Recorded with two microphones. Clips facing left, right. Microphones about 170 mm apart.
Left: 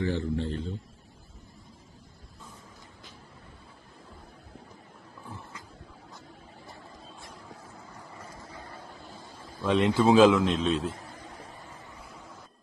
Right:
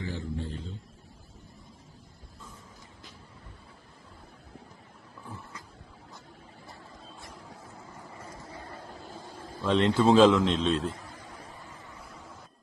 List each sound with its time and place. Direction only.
0.0 s a man's voice: 65° left (ahead or behind)
9.2 s a sound: 55° right (ahead or behind)
9.6 s a man's voice: 10° left (ahead or behind)